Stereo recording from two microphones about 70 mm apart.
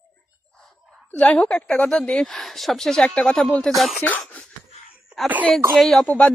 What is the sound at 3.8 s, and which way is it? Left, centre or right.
Speech, centre.